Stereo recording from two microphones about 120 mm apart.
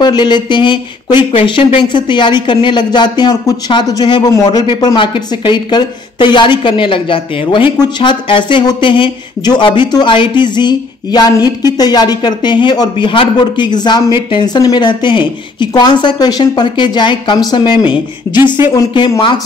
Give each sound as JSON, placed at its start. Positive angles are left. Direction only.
{"t": 0.0, "sound": "speech", "side_deg": 40}